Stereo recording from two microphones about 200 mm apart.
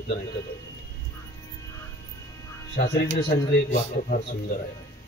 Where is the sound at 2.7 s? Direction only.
55° left (ahead or behind).